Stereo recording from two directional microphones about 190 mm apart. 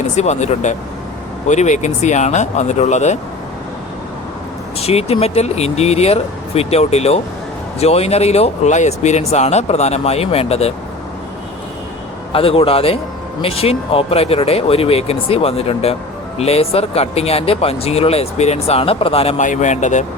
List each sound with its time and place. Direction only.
0.2 s speech: 35° left (ahead or behind)
4.8 s speech: 30° left (ahead or behind)
12.3 s speech: 30° left (ahead or behind)